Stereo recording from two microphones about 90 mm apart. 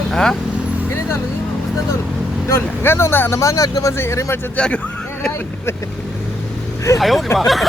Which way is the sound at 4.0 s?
30° left (ahead or behind).